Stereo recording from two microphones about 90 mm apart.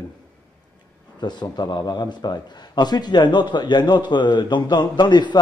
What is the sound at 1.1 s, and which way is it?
A man's voice, 55° left (ahead or behind).